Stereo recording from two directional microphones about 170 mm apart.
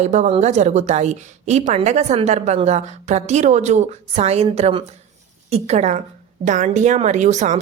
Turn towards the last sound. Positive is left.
turn(degrees=-45)  # may be behind; listen again after turning